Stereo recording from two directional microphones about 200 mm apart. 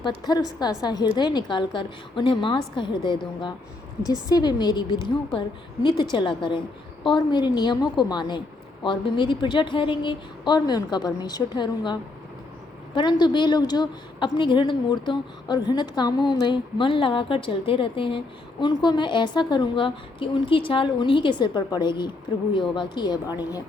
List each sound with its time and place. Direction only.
0.0 s a woman's voice: 20° left (ahead or behind)